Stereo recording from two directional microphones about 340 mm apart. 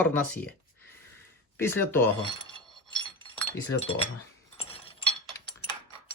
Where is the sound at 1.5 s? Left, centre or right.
Centre.